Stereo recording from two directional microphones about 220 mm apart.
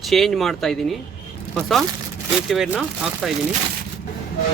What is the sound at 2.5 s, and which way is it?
Speech, 5° right (ahead or behind).